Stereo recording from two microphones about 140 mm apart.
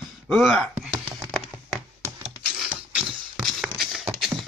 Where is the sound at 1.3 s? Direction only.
Centre (ahead or behind).